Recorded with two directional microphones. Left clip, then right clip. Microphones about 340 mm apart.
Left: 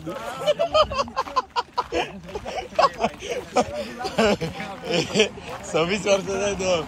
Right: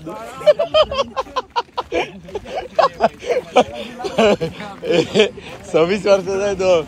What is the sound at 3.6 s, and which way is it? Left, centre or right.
Speech, right.